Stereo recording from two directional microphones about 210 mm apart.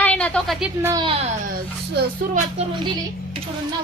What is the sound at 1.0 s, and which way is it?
Speech, 25° right (ahead or behind).